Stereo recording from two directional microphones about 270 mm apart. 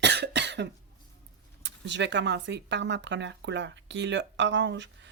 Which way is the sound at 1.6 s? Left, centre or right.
Right.